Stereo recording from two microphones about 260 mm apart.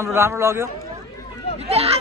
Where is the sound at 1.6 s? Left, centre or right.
Right.